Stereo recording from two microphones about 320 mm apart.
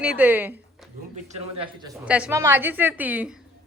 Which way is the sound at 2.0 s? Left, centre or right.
Centre.